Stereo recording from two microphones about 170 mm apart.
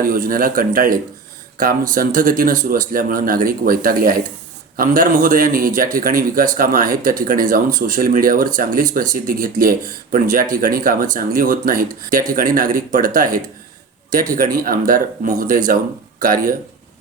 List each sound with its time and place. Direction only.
0.0 s speech: 55° right (ahead or behind)